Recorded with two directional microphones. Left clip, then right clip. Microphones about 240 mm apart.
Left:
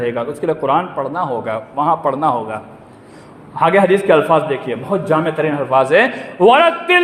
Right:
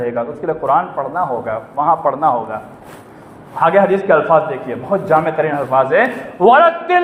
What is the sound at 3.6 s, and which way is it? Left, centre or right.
A man's voice, left.